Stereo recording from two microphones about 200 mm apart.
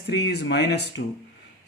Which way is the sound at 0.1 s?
55° left (ahead or behind).